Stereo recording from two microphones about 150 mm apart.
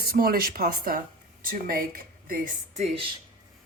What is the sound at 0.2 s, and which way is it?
Speech, 80° right.